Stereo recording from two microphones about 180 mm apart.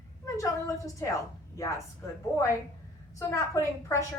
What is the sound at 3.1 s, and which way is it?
Speech, 15° left (ahead or behind).